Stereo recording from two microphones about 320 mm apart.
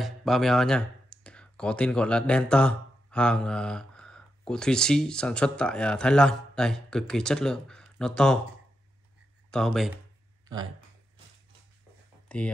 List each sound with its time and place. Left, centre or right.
0.0 s speech: centre
9.5 s speech: centre
12.3 s speech: centre